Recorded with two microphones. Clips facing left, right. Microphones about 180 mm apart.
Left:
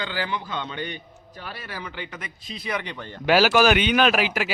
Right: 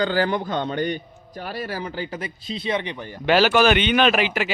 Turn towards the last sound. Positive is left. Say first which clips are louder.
# right 2 dB
turn(degrees=5)  # may be behind; listen again after turning